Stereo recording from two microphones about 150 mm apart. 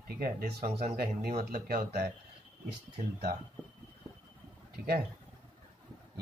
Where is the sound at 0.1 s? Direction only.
90° right.